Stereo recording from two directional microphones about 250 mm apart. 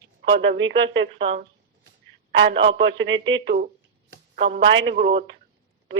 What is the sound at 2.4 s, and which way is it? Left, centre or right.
Speech, right.